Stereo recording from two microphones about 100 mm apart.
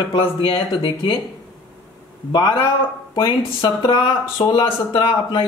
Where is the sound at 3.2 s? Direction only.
50° left (ahead or behind).